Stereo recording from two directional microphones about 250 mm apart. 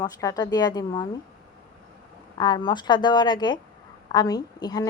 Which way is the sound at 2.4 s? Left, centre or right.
Centre.